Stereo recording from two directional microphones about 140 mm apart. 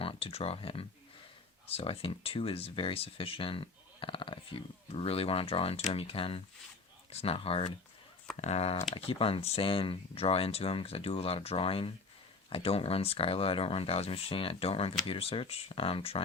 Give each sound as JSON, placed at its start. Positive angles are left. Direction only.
{"t": 0.0, "sound": "speech", "side_deg": 40}